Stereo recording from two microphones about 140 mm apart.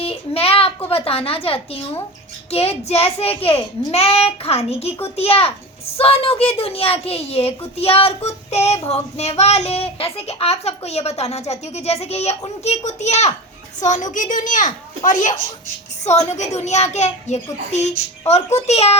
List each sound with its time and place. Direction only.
0.0 s a sound: 45° left (ahead or behind)
2.5 s speech: 45° left (ahead or behind)
13.8 s a child's voice: 65° left (ahead or behind)
16.0 s speech: 55° left (ahead or behind)